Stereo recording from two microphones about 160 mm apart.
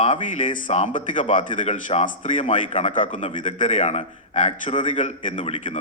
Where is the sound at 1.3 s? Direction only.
35° left (ahead or behind).